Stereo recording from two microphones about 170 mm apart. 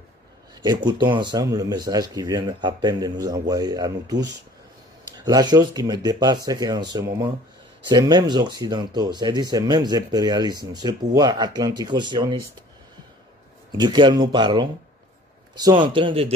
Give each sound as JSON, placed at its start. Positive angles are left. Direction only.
{"t": 0.6, "sound": "speech", "side_deg": -25}
{"t": 13.7, "sound": "speech", "side_deg": -25}